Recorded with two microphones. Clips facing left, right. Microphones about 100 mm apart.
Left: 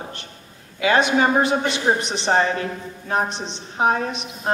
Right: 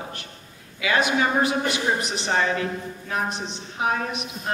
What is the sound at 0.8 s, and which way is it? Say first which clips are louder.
A woman's voice: left 4 dB; 30° left (ahead or behind).